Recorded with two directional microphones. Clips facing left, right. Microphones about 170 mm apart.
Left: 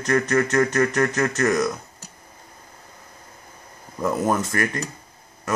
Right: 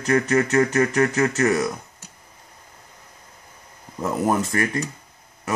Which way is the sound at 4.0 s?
15° right (ahead or behind).